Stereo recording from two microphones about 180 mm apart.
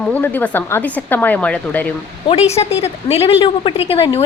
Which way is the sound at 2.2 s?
35° left (ahead or behind).